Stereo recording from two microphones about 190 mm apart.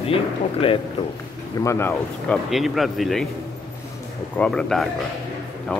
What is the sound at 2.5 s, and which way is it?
Speech, centre (ahead or behind).